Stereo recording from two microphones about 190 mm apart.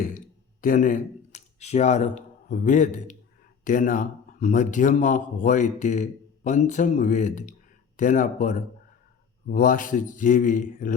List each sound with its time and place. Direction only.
0.6 s speech: 45° left (ahead or behind)